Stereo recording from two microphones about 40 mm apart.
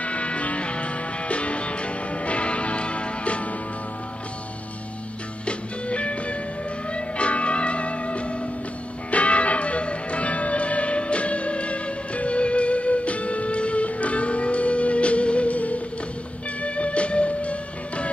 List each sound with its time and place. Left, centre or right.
0.0 s music: left
5.4 s music: left